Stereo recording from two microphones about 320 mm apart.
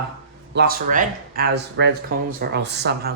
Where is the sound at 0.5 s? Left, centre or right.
Right.